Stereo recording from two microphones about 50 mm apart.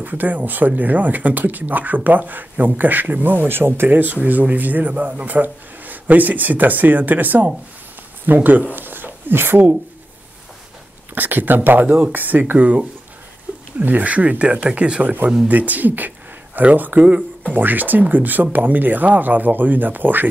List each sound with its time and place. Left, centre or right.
0.0 s speech: right
8.7 s a sound: right
11.1 s speech: right
12.5 s speech: right